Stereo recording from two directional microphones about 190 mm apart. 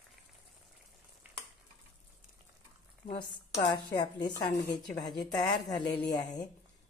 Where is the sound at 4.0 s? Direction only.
20° left (ahead or behind).